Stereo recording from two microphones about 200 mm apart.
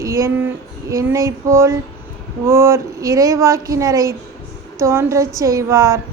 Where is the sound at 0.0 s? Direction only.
15° right (ahead or behind).